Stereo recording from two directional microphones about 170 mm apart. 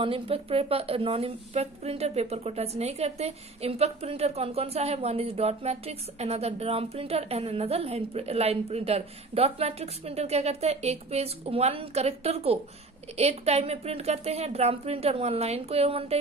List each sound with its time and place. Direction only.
0.0 s a woman's voice: 35° right (ahead or behind)